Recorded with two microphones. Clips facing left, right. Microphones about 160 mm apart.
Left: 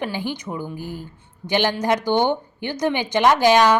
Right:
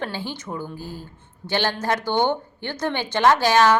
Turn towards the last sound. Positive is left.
turn(degrees=15)  # may be behind; listen again after turning